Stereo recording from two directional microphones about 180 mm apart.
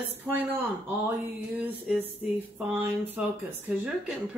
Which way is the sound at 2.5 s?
10° right (ahead or behind).